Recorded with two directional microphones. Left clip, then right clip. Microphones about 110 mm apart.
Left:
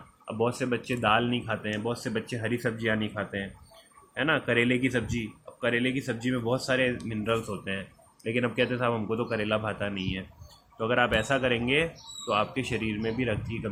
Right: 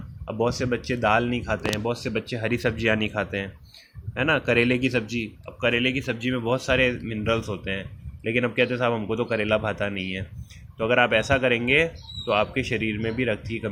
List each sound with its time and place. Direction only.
0.3 s speech: 40° right (ahead or behind)
1.9 s speech: 30° right (ahead or behind)
2.5 s speech: 45° right (ahead or behind)